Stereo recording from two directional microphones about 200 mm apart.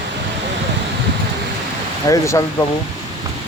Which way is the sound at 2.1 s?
15° left (ahead or behind).